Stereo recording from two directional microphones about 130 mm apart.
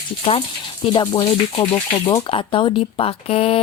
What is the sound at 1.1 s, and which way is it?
Speech, 35° left (ahead or behind).